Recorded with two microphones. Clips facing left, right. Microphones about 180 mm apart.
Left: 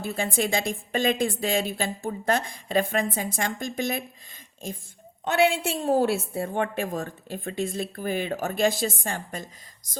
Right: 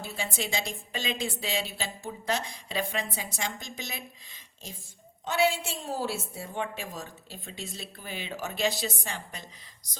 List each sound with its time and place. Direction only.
0.0 s a woman's voice: 50° left (ahead or behind)